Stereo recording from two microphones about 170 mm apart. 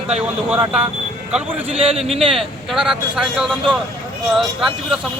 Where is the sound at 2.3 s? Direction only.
Centre (ahead or behind).